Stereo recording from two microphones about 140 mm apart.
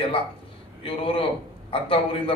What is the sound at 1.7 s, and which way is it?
Speech, 40° left (ahead or behind).